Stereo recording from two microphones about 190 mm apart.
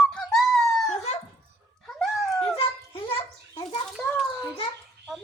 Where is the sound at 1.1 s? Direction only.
35° left (ahead or behind).